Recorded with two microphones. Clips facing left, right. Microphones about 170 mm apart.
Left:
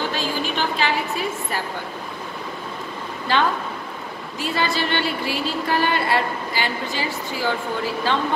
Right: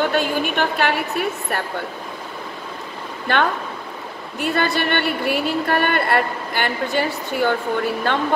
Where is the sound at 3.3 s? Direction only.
60° right (ahead or behind).